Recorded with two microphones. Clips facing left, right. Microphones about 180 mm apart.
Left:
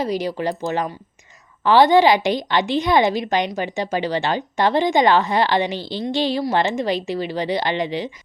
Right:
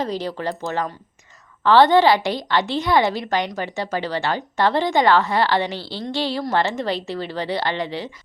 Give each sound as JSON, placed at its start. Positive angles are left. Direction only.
{"t": 0.0, "sound": "a woman's voice", "side_deg": 15}